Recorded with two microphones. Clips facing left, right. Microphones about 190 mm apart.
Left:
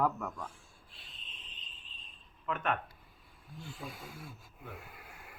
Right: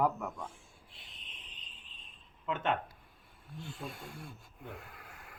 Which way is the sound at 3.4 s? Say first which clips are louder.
Right 2 dB; centre (ahead or behind).